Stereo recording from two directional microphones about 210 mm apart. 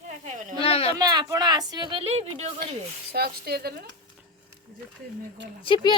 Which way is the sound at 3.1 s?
50° right (ahead or behind).